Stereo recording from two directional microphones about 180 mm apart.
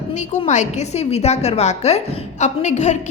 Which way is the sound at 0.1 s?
40° left (ahead or behind).